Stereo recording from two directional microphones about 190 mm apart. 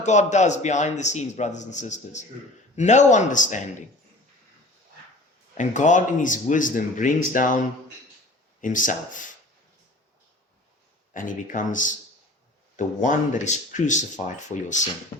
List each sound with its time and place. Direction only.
0.0 s a man's voice: 40° left (ahead or behind)
5.5 s speech: 40° left (ahead or behind)
8.6 s speech: 45° left (ahead or behind)
11.1 s a man's voice: 45° left (ahead or behind)